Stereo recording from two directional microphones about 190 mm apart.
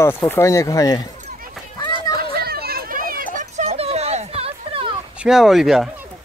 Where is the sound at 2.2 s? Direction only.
55° right (ahead or behind); by 4.9 s 30° right (ahead or behind).